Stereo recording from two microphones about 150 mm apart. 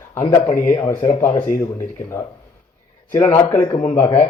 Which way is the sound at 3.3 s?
10° left (ahead or behind).